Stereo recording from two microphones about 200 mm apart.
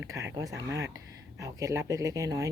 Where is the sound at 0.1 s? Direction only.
15° right (ahead or behind).